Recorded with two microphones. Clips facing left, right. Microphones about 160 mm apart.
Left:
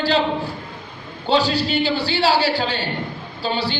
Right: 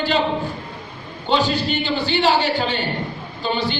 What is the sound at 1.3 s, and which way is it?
Speech, 35° left (ahead or behind).